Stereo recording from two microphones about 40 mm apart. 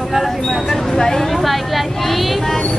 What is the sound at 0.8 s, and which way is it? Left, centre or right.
Speech, centre.